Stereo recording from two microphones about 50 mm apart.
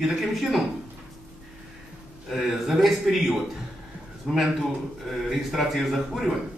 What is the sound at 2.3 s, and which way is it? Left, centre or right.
A man's voice, centre.